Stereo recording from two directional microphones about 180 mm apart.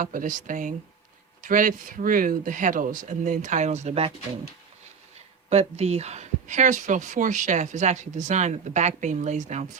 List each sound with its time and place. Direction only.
0.0 s speech: 50° right (ahead or behind)
5.5 s speech: 35° right (ahead or behind)